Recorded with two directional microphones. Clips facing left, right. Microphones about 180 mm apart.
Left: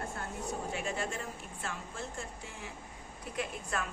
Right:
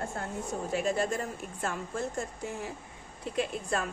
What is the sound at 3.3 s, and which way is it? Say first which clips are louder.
Speech: right 6 dB; 30° right (ahead or behind).